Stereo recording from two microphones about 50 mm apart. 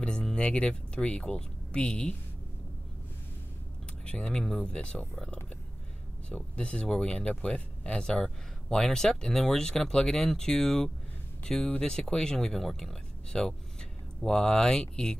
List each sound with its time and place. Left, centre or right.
0.0 s speech: centre
4.0 s speech: left
5.1 s speech: centre
6.2 s speech: left